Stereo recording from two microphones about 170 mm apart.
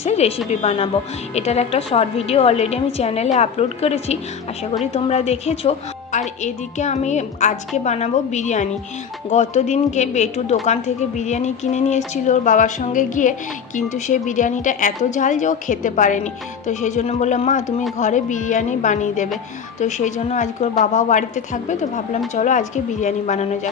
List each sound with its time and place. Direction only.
0.0 s a woman's voice: 40° left (ahead or behind)